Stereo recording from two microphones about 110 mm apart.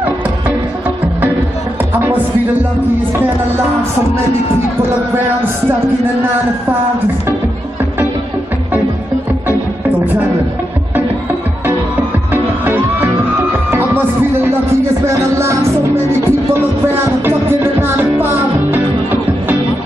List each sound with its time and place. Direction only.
12.3 s music: 20° right (ahead or behind)
15.3 s music: 25° right (ahead or behind)